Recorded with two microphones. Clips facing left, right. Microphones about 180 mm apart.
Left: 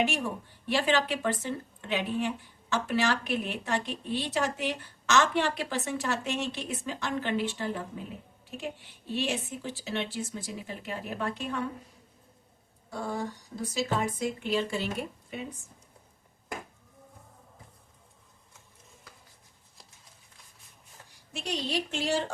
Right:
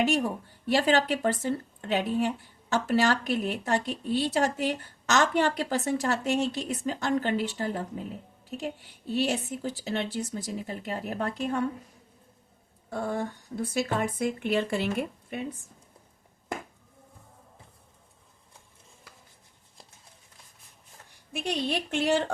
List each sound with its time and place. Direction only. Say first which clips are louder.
0.0 s speech: right 4 dB; 40° right (ahead or behind)
12.9 s speech: right 3 dB; 55° right (ahead or behind)
21.4 s speech: right 2 dB; 55° right (ahead or behind)